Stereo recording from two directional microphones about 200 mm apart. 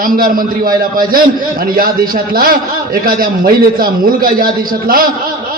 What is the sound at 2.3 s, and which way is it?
A man's voice, 45° right (ahead or behind).